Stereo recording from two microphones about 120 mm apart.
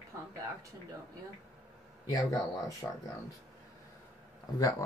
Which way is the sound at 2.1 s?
30° left (ahead or behind).